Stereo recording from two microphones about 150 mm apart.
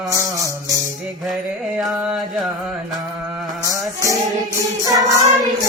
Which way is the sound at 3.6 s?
20° right (ahead or behind).